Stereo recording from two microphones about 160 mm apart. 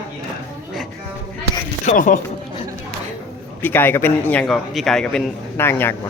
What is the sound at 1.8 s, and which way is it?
Speech, 50° left (ahead or behind).